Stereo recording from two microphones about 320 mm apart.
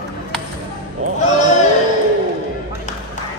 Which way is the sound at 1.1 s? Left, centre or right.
Left.